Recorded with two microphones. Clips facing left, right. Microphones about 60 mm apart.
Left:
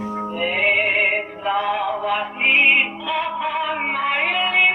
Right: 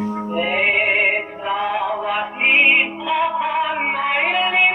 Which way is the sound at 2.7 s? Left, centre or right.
Centre.